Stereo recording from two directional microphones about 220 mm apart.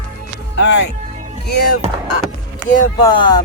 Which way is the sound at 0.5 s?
55° left (ahead or behind).